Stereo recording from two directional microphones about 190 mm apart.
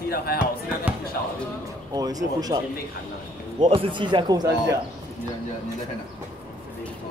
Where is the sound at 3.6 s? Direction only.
30° right (ahead or behind).